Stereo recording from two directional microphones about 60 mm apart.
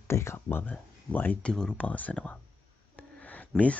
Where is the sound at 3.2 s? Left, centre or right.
Left.